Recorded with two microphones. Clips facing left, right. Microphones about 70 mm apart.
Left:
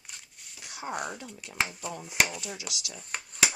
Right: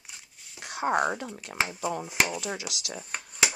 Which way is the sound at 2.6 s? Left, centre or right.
Right.